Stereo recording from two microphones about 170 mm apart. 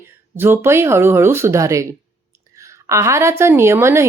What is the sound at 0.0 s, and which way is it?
Speech, 15° right (ahead or behind).